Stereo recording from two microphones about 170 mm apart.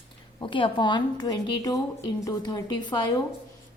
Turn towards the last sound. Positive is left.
turn(degrees=25)  # may be behind; listen again after turning